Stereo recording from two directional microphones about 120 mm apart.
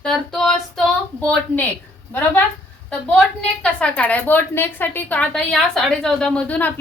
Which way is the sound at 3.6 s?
10° left (ahead or behind).